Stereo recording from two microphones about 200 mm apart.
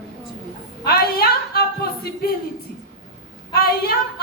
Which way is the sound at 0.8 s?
50° left (ahead or behind).